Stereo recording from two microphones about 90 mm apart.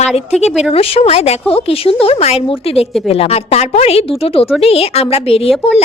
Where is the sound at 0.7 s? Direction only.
90° left.